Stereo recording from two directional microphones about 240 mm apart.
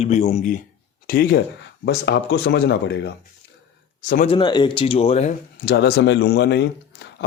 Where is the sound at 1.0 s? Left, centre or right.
Left.